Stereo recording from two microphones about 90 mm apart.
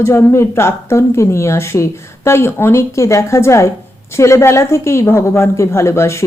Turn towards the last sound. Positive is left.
turn(degrees=30)  # may be behind; listen again after turning